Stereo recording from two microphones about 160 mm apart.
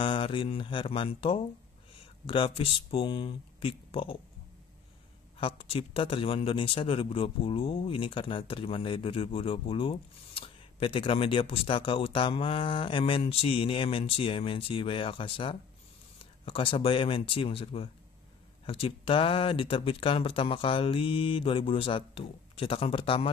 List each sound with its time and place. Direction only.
0.0 s a man's voice: 35° left (ahead or behind)
5.4 s a man's voice: 35° left (ahead or behind)